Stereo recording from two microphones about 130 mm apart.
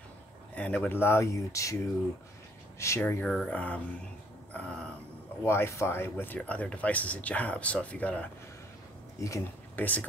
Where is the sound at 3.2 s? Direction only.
5° left (ahead or behind).